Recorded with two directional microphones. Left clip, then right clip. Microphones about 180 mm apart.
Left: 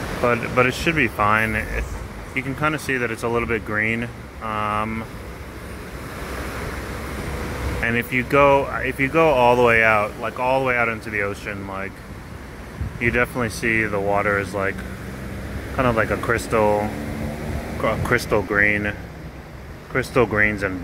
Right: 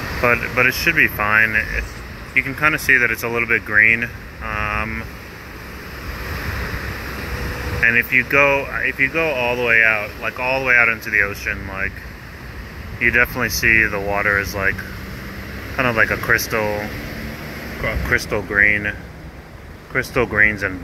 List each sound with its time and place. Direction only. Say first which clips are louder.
0.2 s speech: right 3 dB; 10° left (ahead or behind)
0.8 s speech: right 3 dB; 25° left (ahead or behind)
7.8 s speech: right 8 dB; 30° left (ahead or behind)
10.2 s speech: right 1 dB; 20° left (ahead or behind)
13.0 s speech: right 5 dB; 20° left (ahead or behind)
18.1 s speech: right 4 dB; 30° left (ahead or behind)